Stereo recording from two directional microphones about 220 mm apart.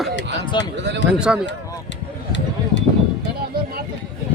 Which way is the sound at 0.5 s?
20° left (ahead or behind).